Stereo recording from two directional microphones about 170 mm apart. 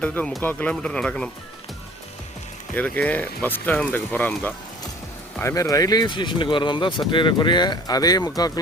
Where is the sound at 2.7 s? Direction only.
10° left (ahead or behind).